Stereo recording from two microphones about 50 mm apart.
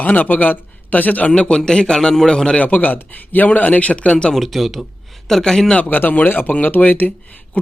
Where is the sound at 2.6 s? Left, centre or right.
Left.